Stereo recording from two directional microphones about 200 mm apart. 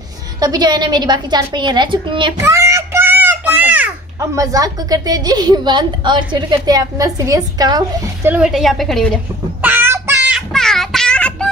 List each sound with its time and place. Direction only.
0.4 s a woman's voice: 20° right (ahead or behind)
8.3 s a woman's voice: 5° right (ahead or behind)
9.6 s child singing: 10° right (ahead or behind); by 11.4 s 5° left (ahead or behind)